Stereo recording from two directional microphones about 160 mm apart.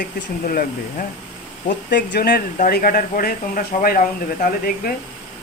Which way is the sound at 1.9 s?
90° left.